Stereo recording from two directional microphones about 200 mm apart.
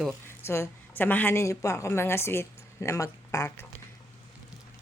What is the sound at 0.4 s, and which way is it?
Speech, 15° left (ahead or behind).